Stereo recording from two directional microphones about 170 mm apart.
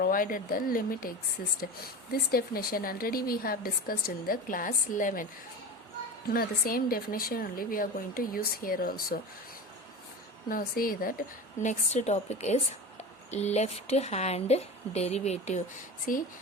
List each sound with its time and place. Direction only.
0.0 s a woman's voice: 55° left (ahead or behind)
2.3 s a woman's voice: 60° left (ahead or behind)
6.3 s a woman's voice: 60° left (ahead or behind)
10.5 s a woman's voice: 55° left (ahead or behind); by 15.6 s 40° left (ahead or behind)
16.1 s a woman's voice: 55° left (ahead or behind)